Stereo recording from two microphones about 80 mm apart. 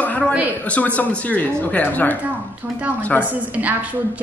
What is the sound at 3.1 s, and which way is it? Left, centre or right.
Speech, centre.